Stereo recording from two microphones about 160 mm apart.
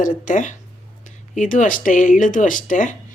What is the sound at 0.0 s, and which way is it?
Speech, 55° left (ahead or behind).